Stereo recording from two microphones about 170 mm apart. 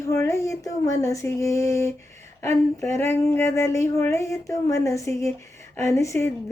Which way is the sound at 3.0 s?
15° left (ahead or behind).